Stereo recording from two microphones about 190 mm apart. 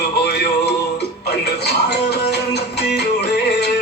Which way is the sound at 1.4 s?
60° left (ahead or behind).